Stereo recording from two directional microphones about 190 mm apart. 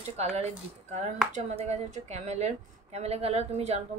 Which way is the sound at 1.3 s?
40° right (ahead or behind).